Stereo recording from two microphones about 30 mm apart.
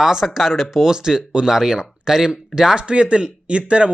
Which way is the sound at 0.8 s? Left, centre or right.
Centre.